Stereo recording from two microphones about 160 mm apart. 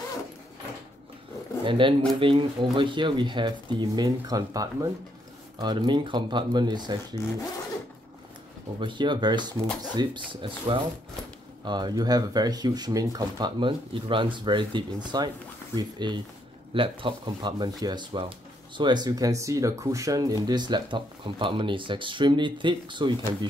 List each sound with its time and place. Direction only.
1.6 s speech: 30° right (ahead or behind)
8.7 s speech: 30° right (ahead or behind)